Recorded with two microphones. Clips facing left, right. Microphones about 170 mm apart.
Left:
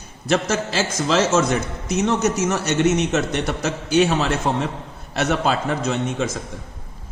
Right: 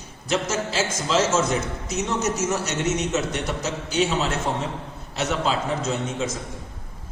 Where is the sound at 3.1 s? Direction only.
70° left (ahead or behind).